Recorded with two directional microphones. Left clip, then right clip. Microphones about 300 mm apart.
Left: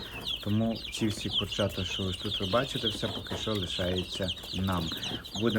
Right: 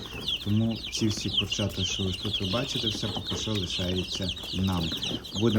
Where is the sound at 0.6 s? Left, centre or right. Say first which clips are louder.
Right 2 dB; centre.